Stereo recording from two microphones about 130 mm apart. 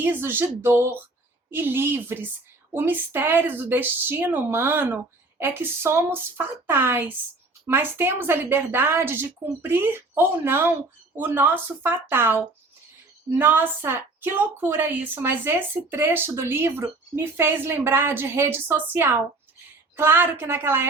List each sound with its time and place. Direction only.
0.0 s a woman's voice: 15° right (ahead or behind)
13.4 s a woman's voice: 15° right (ahead or behind)